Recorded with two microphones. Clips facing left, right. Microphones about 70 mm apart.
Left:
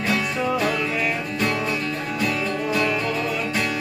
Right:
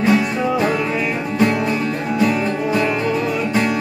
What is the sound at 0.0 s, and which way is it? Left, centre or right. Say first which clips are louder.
Music: right 7 dB; right.